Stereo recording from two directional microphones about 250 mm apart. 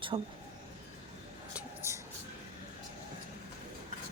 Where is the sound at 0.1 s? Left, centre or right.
Centre.